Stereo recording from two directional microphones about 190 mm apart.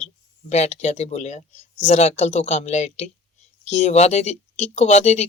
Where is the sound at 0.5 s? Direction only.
35° left (ahead or behind).